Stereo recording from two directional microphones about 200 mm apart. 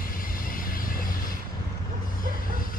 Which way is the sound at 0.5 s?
45° left (ahead or behind).